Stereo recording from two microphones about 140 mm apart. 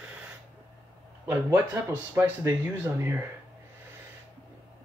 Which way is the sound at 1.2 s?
15° right (ahead or behind).